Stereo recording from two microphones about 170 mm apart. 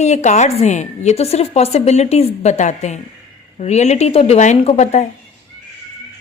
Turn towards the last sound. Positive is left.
turn(degrees=45)  # may be behind; listen again after turning